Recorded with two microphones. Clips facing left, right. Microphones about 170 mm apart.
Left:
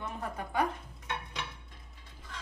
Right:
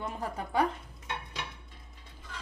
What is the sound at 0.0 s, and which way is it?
Speech, 35° right (ahead or behind).